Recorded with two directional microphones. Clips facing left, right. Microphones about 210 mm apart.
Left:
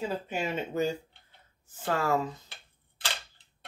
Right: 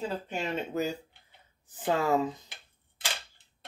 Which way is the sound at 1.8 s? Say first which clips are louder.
Right 2 dB; 15° right (ahead or behind).